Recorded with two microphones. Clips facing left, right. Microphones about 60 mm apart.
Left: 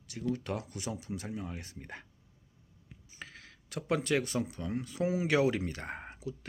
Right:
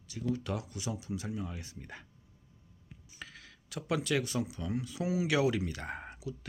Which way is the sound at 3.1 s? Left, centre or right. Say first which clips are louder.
Left 1 dB; left.